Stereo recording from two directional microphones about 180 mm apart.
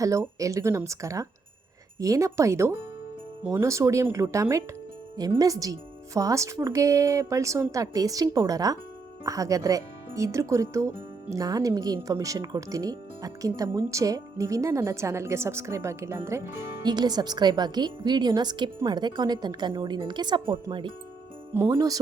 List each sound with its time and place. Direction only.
0.0 s speech: 15° right (ahead or behind)